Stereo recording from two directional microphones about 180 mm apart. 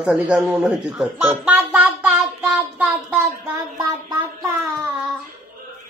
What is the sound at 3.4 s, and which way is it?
Child singing, 20° right (ahead or behind).